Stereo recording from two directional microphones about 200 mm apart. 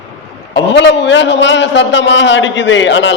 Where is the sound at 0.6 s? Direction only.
60° left (ahead or behind).